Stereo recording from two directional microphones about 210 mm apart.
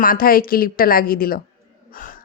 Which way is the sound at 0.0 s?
40° left (ahead or behind).